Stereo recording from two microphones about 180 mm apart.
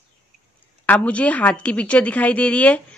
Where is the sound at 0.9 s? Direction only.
10° left (ahead or behind).